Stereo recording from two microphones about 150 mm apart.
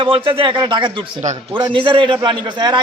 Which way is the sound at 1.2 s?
55° right (ahead or behind).